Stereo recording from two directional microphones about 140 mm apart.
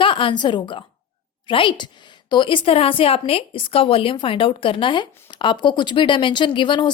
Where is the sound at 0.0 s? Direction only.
35° left (ahead or behind).